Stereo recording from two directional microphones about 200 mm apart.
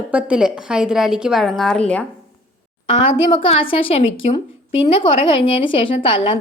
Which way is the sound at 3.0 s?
30° left (ahead or behind).